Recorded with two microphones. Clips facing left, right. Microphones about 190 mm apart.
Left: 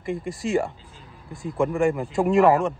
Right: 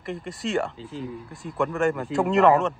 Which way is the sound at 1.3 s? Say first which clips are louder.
Left 4 dB; centre (ahead or behind).